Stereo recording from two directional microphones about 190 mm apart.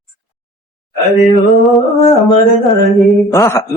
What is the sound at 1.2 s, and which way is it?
Mantra, centre (ahead or behind).